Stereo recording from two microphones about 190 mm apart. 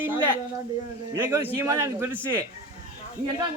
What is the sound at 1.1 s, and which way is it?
A man's voice, 10° right (ahead or behind).